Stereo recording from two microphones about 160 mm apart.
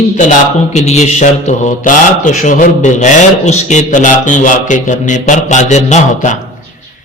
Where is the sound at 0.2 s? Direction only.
50° left (ahead or behind).